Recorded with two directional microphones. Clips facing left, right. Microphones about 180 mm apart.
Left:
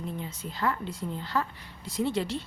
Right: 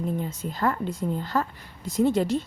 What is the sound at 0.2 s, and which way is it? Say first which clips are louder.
A woman's voice: right 5 dB; 45° right (ahead or behind).